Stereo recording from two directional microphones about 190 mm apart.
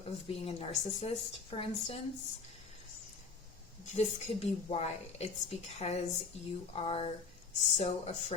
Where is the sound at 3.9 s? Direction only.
35° left (ahead or behind).